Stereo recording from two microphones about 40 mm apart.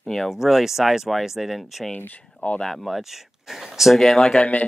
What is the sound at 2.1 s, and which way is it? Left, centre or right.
Speech, left.